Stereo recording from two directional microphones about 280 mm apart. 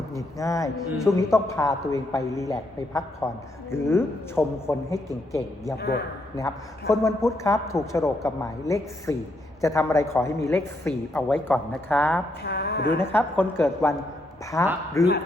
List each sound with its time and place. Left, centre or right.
0.2 s a man's voice: centre
5.7 s a man's voice: left
6.3 s a man's voice: centre
12.5 s speech: left
13.0 s a man's voice: centre